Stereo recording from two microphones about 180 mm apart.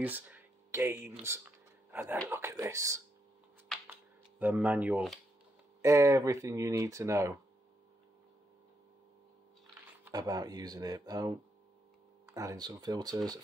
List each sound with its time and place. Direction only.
0.0 s a sound: 10° right (ahead or behind)
2.2 s speech: 15° right (ahead or behind)
4.4 s speech: 10° right (ahead or behind)
5.8 s speech: 15° right (ahead or behind)
10.1 s speech: 20° right (ahead or behind)
12.4 s speech: 20° right (ahead or behind)